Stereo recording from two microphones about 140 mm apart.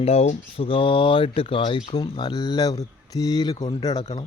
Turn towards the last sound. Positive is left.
turn(degrees=30)  # may be behind; listen again after turning